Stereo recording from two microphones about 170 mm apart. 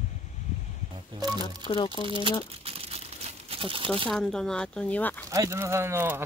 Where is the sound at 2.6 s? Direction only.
35° right (ahead or behind).